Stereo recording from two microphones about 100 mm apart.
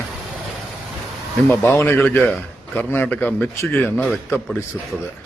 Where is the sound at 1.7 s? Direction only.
20° left (ahead or behind).